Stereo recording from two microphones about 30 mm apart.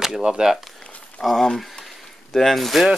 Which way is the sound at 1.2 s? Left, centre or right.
Left.